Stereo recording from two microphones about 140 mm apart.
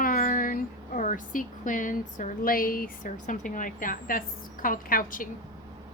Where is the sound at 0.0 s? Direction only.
85° left.